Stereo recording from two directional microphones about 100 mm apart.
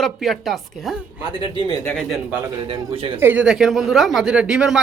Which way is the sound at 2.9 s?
65° right (ahead or behind).